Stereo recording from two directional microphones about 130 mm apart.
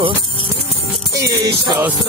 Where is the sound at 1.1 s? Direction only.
25° right (ahead or behind).